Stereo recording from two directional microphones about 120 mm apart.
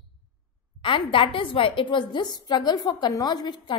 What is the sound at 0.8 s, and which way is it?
A woman's voice, 45° left (ahead or behind).